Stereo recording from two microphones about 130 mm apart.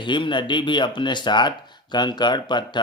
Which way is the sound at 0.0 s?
40° left (ahead or behind).